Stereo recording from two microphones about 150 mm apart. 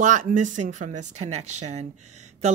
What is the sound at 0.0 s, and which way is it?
Speech, 55° right (ahead or behind).